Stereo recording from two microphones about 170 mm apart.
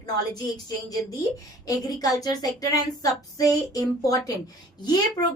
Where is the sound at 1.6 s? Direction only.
20° left (ahead or behind).